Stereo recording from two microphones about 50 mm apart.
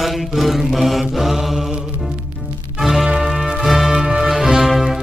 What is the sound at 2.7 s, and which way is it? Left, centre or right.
Music, centre.